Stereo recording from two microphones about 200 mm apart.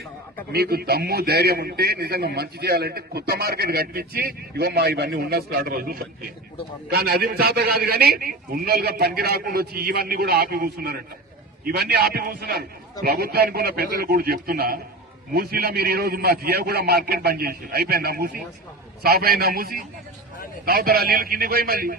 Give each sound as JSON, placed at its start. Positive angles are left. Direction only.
{"t": 0.5, "sound": "a man's voice", "side_deg": -50}